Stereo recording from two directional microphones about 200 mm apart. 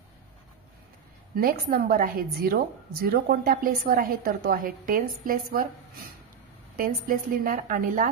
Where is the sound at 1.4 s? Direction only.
50° right (ahead or behind).